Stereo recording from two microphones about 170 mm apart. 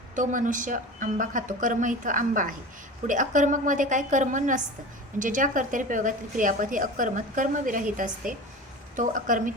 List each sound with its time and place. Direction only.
0.2 s a woman's voice: 50° right (ahead or behind)